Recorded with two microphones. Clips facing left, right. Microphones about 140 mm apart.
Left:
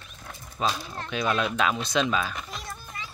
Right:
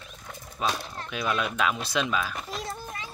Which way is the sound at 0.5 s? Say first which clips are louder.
Left 1 dB; centre (ahead or behind).